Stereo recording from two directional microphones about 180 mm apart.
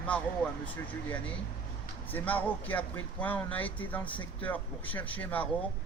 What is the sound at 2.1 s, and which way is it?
Speech, 10° left (ahead or behind).